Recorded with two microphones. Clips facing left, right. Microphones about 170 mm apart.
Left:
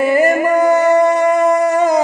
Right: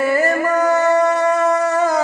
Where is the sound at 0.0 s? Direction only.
15° left (ahead or behind).